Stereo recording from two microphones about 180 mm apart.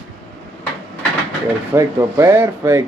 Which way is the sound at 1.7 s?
15° right (ahead or behind).